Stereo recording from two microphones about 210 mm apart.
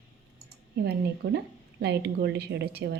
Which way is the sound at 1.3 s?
55° right (ahead or behind).